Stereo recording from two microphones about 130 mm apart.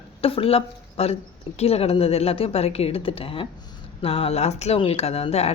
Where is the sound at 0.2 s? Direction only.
45° left (ahead or behind).